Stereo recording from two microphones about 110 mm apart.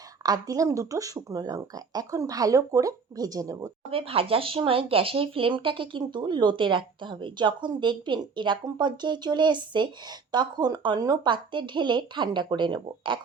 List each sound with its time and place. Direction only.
0.2 s speech: 35° right (ahead or behind)
3.9 s speech: 60° right (ahead or behind)